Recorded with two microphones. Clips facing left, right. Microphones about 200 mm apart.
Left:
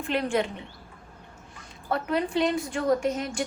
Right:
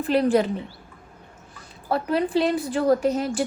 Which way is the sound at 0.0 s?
35° right (ahead or behind).